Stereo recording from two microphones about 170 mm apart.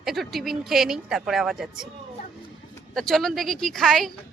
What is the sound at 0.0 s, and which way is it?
A woman's voice, centre (ahead or behind).